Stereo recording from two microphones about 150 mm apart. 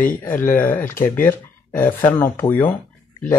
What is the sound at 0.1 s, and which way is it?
Speech, 15° left (ahead or behind).